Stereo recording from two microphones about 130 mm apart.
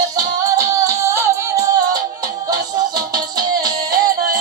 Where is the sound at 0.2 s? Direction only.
25° right (ahead or behind).